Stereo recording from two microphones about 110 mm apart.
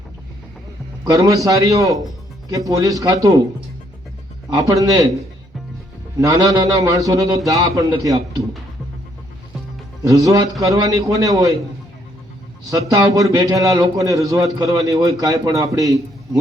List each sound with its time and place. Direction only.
1.0 s a man's voice: 30° right (ahead or behind)
4.7 s a man's voice: 30° right (ahead or behind)
6.1 s a man's voice: 30° right (ahead or behind)
10.0 s a man's voice: 30° right (ahead or behind)
12.7 s a man's voice: 30° right (ahead or behind)